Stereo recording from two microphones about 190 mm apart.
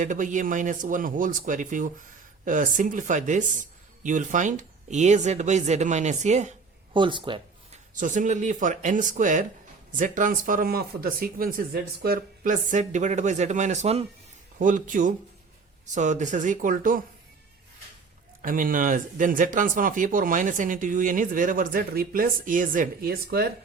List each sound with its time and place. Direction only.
0.0 s speech: 40° right (ahead or behind)
6.9 s speech: 25° right (ahead or behind)
7.9 s speech: 40° right (ahead or behind)
18.4 s speech: 45° right (ahead or behind)